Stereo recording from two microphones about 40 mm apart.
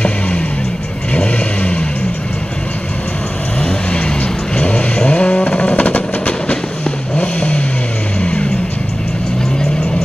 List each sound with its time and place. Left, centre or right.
1.1 s vehicle: left
3.6 s vehicle: left